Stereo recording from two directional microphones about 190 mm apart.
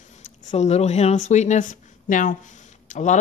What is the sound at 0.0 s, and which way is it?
Speech, 40° left (ahead or behind).